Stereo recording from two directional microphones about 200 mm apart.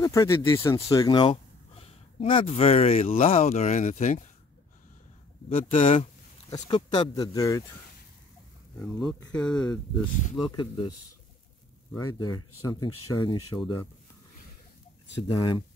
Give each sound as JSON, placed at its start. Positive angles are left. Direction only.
{"t": 0.0, "sound": "speech", "side_deg": 15}
{"t": 5.6, "sound": "speech", "side_deg": 30}
{"t": 8.7, "sound": "speech", "side_deg": 0}
{"t": 10.4, "sound": "speech", "side_deg": 25}
{"t": 11.9, "sound": "speech", "side_deg": 20}
{"t": 15.3, "sound": "speech", "side_deg": 25}